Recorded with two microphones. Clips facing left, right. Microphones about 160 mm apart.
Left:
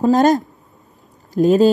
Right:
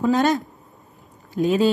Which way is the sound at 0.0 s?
40° left (ahead or behind).